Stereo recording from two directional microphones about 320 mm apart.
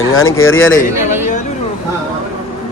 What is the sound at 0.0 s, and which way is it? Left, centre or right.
Speech, left.